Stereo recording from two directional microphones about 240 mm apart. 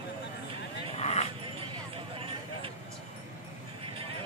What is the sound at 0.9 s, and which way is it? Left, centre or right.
Dog, left.